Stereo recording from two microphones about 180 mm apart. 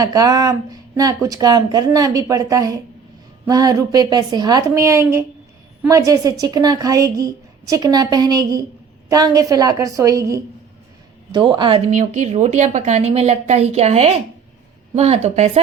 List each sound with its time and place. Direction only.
0.0 s a woman's voice: 20° right (ahead or behind)
11.9 s a woman's voice: 45° right (ahead or behind)